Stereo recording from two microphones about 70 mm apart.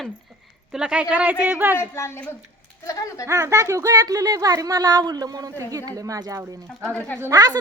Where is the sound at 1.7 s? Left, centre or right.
Left.